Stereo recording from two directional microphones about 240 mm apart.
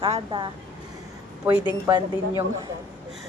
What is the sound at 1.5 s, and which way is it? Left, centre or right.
Speech, centre.